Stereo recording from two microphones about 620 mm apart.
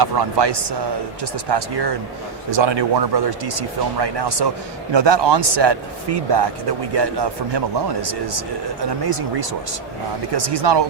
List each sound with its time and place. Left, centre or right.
0.0 s speech: right